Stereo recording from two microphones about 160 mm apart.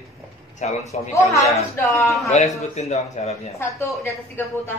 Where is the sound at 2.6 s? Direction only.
45° left (ahead or behind).